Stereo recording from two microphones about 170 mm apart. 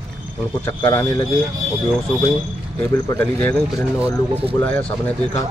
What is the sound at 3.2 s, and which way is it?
Speech, 10° left (ahead or behind).